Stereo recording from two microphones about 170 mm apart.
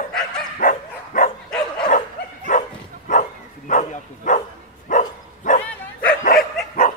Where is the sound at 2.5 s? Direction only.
45° left (ahead or behind).